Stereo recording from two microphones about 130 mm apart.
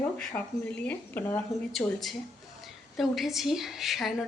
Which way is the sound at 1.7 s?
Centre (ahead or behind).